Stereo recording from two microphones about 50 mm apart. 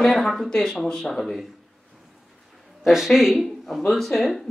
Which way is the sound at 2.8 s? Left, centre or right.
Centre.